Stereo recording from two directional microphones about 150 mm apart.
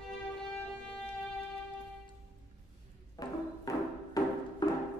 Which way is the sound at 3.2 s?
25° left (ahead or behind).